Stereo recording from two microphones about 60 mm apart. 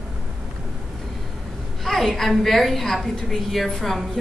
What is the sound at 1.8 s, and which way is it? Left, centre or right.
A woman's voice, centre.